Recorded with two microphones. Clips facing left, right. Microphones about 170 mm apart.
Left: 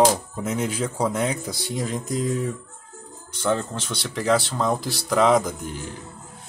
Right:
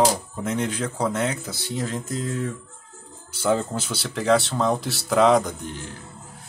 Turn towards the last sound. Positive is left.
turn(degrees=10)  # may be behind; listen again after turning